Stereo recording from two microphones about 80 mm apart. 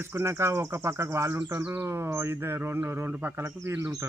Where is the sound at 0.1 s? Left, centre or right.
Right.